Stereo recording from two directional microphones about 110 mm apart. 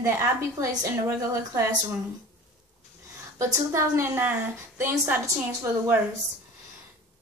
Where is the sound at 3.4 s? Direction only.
25° right (ahead or behind).